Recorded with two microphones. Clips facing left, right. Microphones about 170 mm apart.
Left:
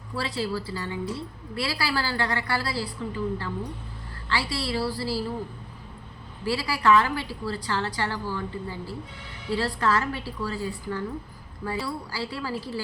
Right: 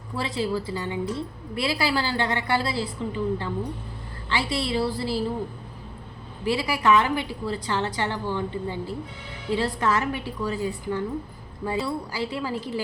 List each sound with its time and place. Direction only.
0.2 s a woman's voice: 20° right (ahead or behind)
6.4 s a woman's voice: 20° right (ahead or behind)